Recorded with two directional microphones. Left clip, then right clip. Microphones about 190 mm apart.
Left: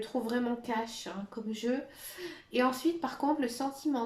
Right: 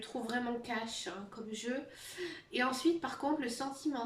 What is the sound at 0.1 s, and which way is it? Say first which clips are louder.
Speech: left 6 dB; 30° left (ahead or behind).